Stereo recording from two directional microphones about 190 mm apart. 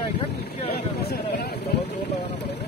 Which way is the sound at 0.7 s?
60° left (ahead or behind).